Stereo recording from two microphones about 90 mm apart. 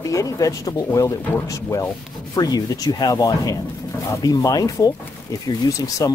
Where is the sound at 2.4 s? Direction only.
45° left (ahead or behind).